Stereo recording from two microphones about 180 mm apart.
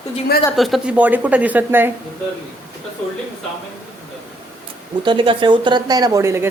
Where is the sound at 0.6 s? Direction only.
Centre (ahead or behind).